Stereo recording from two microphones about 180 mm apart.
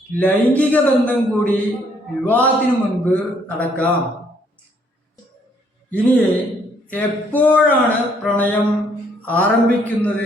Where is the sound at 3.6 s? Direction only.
10° left (ahead or behind).